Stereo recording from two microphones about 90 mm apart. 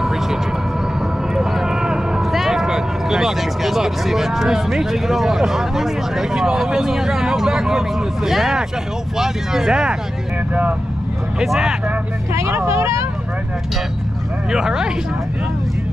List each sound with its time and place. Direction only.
0.0 s a sound: 5° right (ahead or behind)
1.3 s speech: 5° right (ahead or behind)
11.3 s speech: 5° right (ahead or behind)
12.4 s speech: 30° right (ahead or behind)
14.5 s speech: 5° right (ahead or behind)